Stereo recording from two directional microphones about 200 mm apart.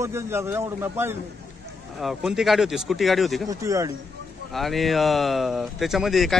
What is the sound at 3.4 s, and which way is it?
Speech, 15° right (ahead or behind).